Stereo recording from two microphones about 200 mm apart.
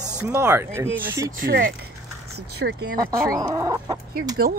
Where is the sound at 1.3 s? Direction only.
45° right (ahead or behind).